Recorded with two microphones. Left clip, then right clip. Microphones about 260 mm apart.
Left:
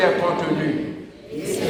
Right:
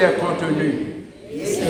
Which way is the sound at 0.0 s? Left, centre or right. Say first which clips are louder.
Right 1 dB; left.